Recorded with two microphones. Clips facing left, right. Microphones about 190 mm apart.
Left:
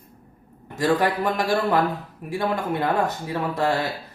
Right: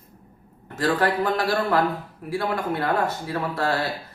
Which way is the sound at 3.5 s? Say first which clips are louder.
Left 3 dB; 20° left (ahead or behind).